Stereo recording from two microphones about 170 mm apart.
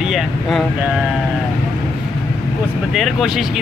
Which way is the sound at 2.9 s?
Centre (ahead or behind).